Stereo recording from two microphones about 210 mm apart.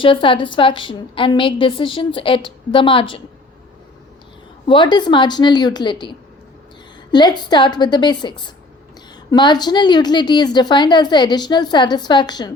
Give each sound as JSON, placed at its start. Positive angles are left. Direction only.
{"t": 0.0, "sound": "a woman's voice", "side_deg": 25}
{"t": 4.6, "sound": "a woman's voice", "side_deg": 20}